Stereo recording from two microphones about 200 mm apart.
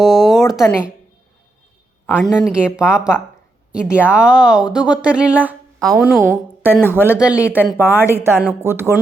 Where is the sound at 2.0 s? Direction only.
5° left (ahead or behind).